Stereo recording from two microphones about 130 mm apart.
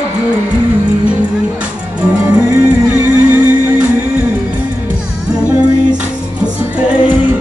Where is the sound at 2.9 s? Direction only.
15° right (ahead or behind).